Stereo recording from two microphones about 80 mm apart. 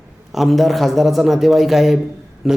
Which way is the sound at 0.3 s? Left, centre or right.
Centre.